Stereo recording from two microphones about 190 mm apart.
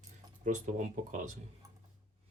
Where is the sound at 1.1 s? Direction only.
40° right (ahead or behind).